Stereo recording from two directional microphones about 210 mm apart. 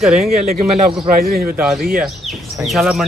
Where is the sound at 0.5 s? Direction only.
35° right (ahead or behind).